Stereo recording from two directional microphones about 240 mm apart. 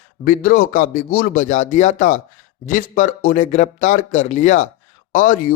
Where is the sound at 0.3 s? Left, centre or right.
Left.